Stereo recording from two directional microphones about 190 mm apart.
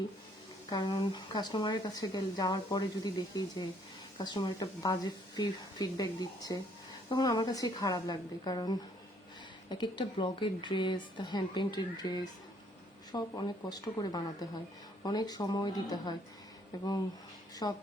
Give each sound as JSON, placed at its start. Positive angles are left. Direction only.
{"t": 0.7, "sound": "speech", "side_deg": 25}
{"t": 17.6, "sound": "speech", "side_deg": 20}